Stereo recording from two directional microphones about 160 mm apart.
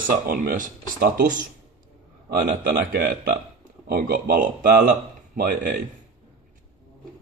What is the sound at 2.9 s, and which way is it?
A man's voice, 60° right (ahead or behind).